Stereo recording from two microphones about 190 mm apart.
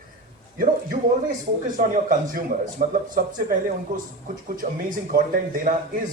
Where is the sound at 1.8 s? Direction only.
45° right (ahead or behind).